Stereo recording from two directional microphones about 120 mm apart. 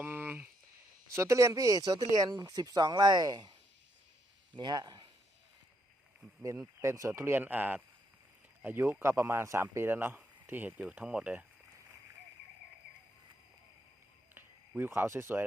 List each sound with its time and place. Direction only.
0.0 s a sound: 15° right (ahead or behind)
1.1 s speech: 25° right (ahead or behind)
4.5 s speech: 35° right (ahead or behind)
6.8 s speech: 25° right (ahead or behind)
14.3 s speech: 15° right (ahead or behind)